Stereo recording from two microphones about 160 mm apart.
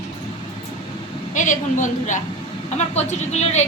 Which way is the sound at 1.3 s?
50° left (ahead or behind).